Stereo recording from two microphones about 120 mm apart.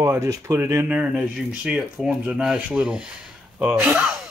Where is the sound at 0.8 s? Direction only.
10° right (ahead or behind).